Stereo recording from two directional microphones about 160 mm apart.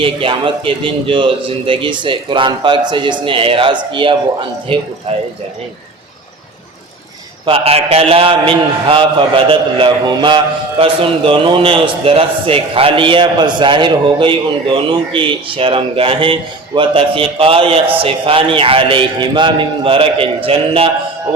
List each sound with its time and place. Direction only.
0.0 s a man's voice: 35° right (ahead or behind)
7.4 s a man's voice: 35° right (ahead or behind)